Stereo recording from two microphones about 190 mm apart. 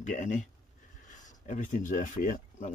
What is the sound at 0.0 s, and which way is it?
Speech, 40° left (ahead or behind).